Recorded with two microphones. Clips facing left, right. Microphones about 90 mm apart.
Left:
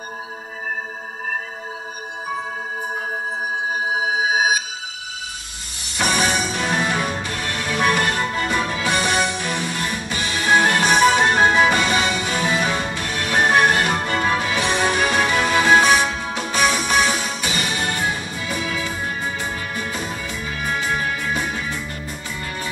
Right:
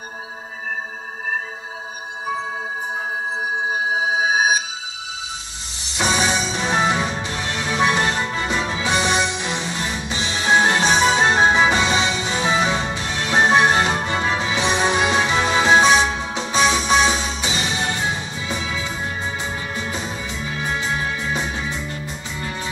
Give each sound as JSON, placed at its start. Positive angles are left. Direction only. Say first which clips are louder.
{"t": 5.9, "sound": "music", "louder": "even", "side_deg": -20}